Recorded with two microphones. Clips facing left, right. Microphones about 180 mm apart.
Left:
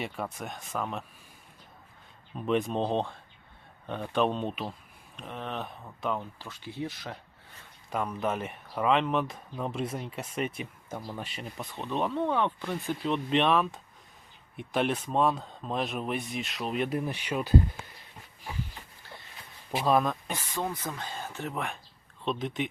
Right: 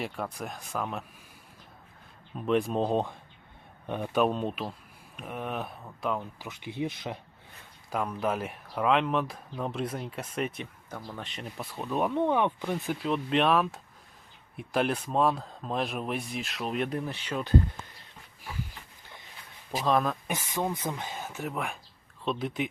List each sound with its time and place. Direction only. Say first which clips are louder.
0.0 s speech: right 1 dB; centre (ahead or behind)
2.5 s speech: right 1 dB; centre (ahead or behind)
6.4 s speech: right 3 dB; 20° right (ahead or behind)
7.9 s speech: right 1 dB; centre (ahead or behind)
13.0 s speech: left 1 dB; centre (ahead or behind)
17.1 s speech: left 2 dB; 10° left (ahead or behind)
19.8 s speech: left 1 dB; 5° left (ahead or behind)
20.2 s speech: right 2 dB; 10° right (ahead or behind)
21.2 s speech: even; centre (ahead or behind)